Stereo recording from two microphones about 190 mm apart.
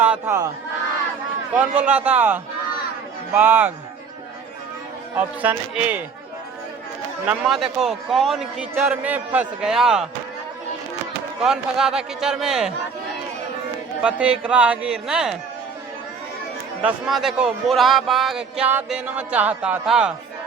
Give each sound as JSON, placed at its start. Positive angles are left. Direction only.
{"t": 0.0, "sound": "speech", "side_deg": -10}
{"t": 1.5, "sound": "a man's voice", "side_deg": -5}
{"t": 5.1, "sound": "a man's voice", "side_deg": -10}
{"t": 7.3, "sound": "speech", "side_deg": 0}
{"t": 11.4, "sound": "speech", "side_deg": -5}
{"t": 14.0, "sound": "speech", "side_deg": -5}
{"t": 16.8, "sound": "speech", "side_deg": 0}